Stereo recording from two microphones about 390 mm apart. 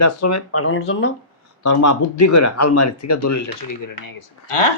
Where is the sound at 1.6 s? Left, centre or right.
Left.